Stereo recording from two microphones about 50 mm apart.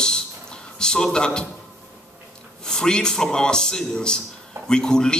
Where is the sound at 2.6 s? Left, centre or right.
Centre.